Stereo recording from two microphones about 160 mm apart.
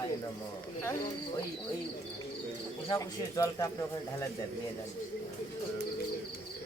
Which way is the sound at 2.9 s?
20° left (ahead or behind).